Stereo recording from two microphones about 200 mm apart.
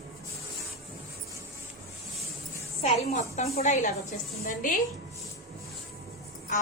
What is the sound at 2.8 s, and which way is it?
A woman's voice, 30° left (ahead or behind).